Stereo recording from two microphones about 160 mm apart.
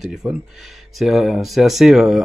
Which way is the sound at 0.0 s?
Centre (ahead or behind).